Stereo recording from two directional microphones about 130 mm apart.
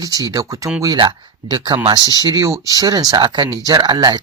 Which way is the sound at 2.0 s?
30° left (ahead or behind).